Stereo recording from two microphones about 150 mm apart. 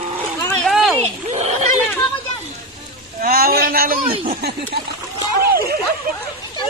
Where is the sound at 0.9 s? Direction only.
45° right (ahead or behind).